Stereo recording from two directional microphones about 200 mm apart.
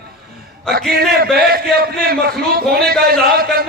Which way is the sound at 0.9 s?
50° right (ahead or behind).